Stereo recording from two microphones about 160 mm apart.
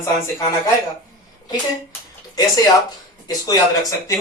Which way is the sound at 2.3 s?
25° left (ahead or behind).